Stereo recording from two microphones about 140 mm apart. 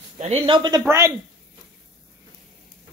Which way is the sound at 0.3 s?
35° right (ahead or behind).